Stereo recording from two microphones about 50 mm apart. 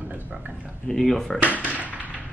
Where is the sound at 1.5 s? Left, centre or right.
Right.